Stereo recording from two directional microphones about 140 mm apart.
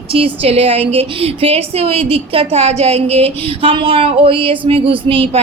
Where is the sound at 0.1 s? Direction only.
45° right (ahead or behind).